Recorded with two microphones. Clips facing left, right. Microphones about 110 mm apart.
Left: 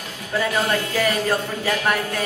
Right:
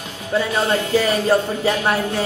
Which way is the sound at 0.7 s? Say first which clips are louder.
Right 4 dB; 25° right (ahead or behind).